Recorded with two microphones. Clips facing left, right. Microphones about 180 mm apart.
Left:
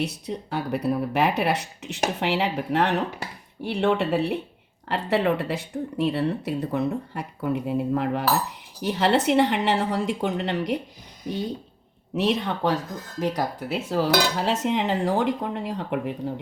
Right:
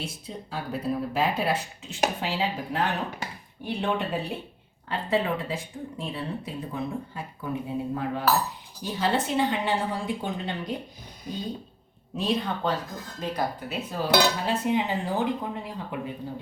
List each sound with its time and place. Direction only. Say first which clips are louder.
0.0 s speech: left 8 dB; 70° left (ahead or behind)
12.1 s cutlery: left 3 dB; 80° left